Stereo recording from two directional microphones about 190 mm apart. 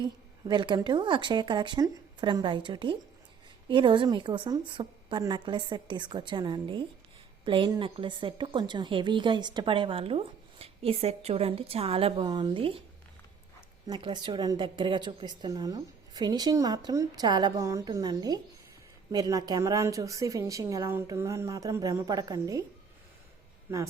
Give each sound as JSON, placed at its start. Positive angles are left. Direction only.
{"t": 0.0, "sound": "a woman's voice", "side_deg": -25}
{"t": 13.8, "sound": "a woman's voice", "side_deg": -25}
{"t": 23.7, "sound": "speech", "side_deg": -10}